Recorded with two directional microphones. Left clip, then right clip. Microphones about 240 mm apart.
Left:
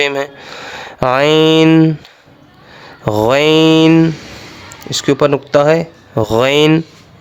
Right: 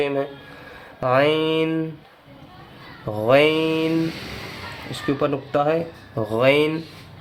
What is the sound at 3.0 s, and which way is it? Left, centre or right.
Speech, left.